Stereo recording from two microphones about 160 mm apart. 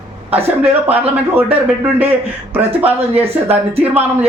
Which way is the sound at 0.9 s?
10° right (ahead or behind).